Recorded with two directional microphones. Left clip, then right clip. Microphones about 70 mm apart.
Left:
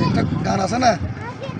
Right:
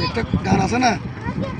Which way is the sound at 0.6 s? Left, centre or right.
Left.